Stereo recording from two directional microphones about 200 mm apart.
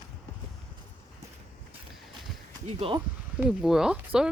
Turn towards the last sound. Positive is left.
turn(degrees=-5)  # may be behind; listen again after turning